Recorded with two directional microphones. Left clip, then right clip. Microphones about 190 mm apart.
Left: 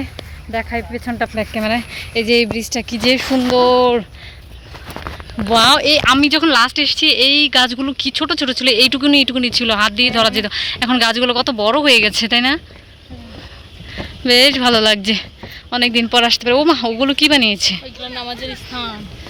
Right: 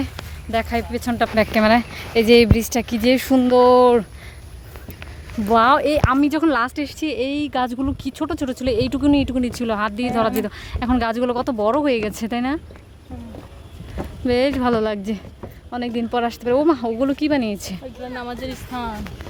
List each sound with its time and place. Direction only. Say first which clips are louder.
0.5 s speech: even; 15° right (ahead or behind)
5.5 s speech: left 4 dB; 5° right (ahead or behind)
13.9 s speech: left 8 dB; 5° right (ahead or behind)
18.1 s speech: left 4 dB; 55° right (ahead or behind)